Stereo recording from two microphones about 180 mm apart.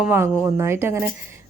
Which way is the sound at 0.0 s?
10° right (ahead or behind).